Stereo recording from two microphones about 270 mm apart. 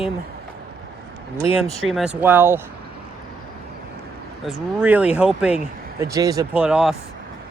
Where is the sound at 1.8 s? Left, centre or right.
Centre.